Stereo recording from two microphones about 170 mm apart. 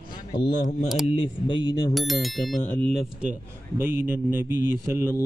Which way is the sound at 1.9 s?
Centre (ahead or behind).